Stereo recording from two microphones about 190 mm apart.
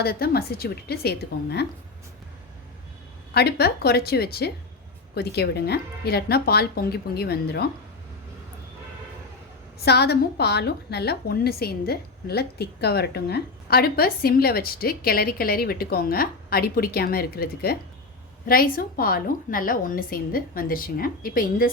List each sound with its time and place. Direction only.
0.0 s speech: 55° left (ahead or behind)
3.3 s speech: 55° left (ahead or behind)
9.8 s a woman's voice: 60° left (ahead or behind)